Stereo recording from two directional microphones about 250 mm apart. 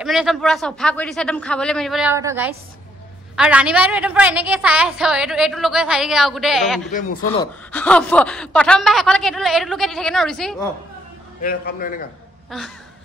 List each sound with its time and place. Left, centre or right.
0.0 s a woman's voice: centre
6.9 s a man's voice: left
7.7 s a woman's voice: centre
11.4 s a man's voice: left
12.4 s a sound: centre